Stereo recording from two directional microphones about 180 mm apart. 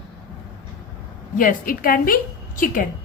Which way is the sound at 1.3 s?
50° left (ahead or behind).